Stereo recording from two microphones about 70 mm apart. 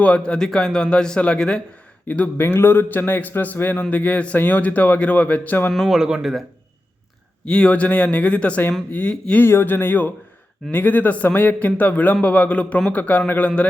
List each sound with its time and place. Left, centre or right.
0.0 s speech: centre
2.0 s a man's voice: left
5.7 s speech: centre
7.4 s a man's voice: centre
9.4 s a man's voice: left